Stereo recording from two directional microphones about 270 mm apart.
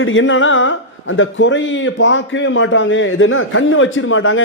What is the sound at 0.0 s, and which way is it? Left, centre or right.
Speech, left.